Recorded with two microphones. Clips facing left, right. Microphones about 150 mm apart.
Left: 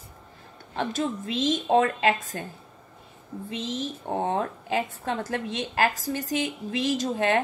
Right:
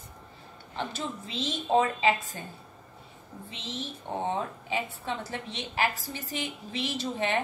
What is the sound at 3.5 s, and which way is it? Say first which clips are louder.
A woman's voice: left 7 dB; 45° left (ahead or behind).